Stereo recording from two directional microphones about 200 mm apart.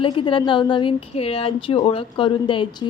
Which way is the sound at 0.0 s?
25° left (ahead or behind).